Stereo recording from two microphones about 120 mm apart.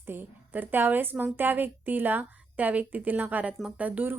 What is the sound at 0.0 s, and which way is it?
A woman's voice, 15° right (ahead or behind).